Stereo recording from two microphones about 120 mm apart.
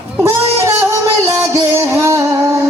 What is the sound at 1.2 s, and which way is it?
Music, 25° right (ahead or behind).